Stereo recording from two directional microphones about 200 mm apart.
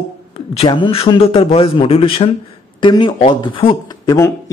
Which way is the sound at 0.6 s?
25° left (ahead or behind).